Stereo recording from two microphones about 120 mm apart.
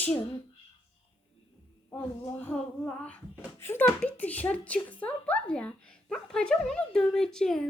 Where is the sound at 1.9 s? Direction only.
10° left (ahead or behind).